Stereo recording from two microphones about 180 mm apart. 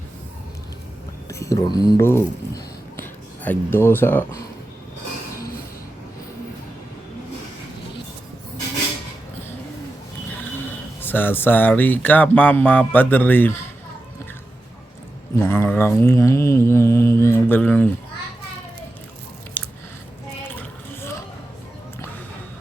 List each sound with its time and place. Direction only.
1.3 s speech: 15° left (ahead or behind)
11.0 s speech: 10° left (ahead or behind)
15.4 s mantra: 15° left (ahead or behind)
20.6 s a sound: 15° left (ahead or behind)